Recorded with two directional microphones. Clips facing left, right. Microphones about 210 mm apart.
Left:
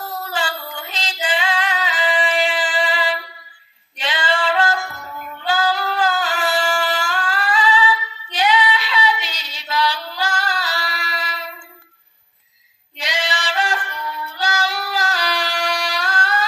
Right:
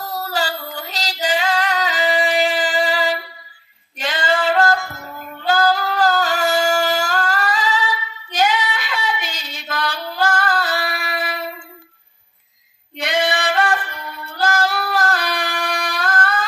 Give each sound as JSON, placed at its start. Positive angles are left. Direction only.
{"t": 0.3, "sound": "female singing", "side_deg": -40}
{"t": 5.4, "sound": "singing", "side_deg": -40}
{"t": 12.9, "sound": "female singing", "side_deg": -55}